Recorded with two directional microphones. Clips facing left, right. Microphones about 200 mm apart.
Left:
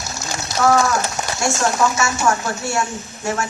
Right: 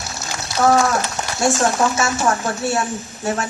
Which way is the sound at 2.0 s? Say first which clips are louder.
Even; 35° right (ahead or behind).